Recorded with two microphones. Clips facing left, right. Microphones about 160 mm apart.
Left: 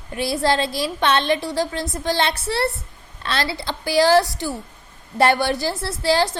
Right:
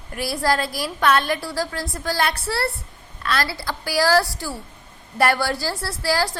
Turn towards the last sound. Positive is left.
turn(degrees=20)  # may be behind; listen again after turning